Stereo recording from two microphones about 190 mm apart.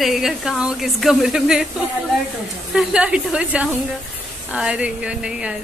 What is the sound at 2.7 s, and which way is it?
A woman's voice, 5° right (ahead or behind).